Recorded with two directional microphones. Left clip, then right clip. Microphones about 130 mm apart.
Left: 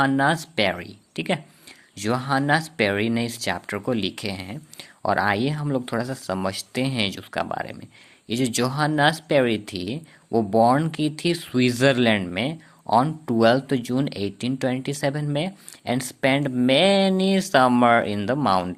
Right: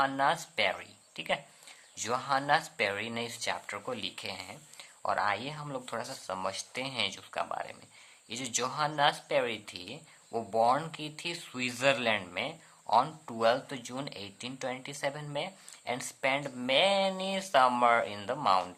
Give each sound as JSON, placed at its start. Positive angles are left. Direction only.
{"t": 0.2, "sound": "speech", "side_deg": 40}